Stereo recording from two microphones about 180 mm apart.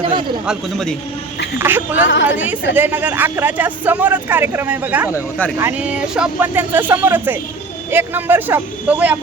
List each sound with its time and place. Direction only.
0.0 s a man's voice: 25° right (ahead or behind)
0.4 s a man's voice: 5° left (ahead or behind)
1.5 s speech: 10° right (ahead or behind)